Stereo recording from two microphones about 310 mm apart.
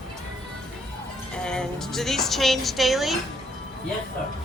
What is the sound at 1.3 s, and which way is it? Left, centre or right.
Speech, centre.